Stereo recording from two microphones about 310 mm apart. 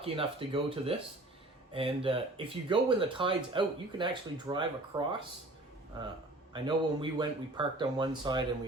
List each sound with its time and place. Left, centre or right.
0.0 s speech: centre
6.5 s speech: centre